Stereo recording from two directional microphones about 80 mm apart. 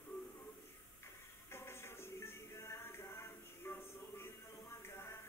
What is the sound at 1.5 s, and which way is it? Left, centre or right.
Music, left.